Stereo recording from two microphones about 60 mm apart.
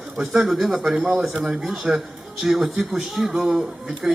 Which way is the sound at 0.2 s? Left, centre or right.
Centre.